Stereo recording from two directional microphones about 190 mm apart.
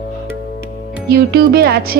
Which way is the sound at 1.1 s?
60° right (ahead or behind).